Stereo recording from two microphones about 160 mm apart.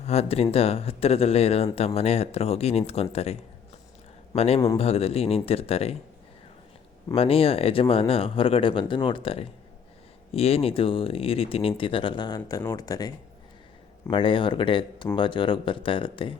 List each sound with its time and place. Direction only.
0.0 s speech: 40° left (ahead or behind)
4.4 s speech: 40° left (ahead or behind)
7.1 s speech: 35° left (ahead or behind)